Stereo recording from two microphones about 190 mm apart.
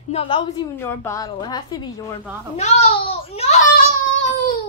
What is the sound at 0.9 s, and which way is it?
A woman's voice, 15° left (ahead or behind).